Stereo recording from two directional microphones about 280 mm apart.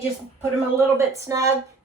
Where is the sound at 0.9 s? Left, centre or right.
Centre.